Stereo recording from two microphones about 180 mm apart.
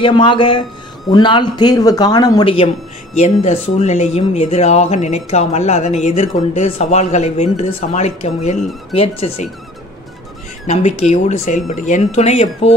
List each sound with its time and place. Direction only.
0.0 s speech: 25° left (ahead or behind)
10.7 s speech: 35° left (ahead or behind)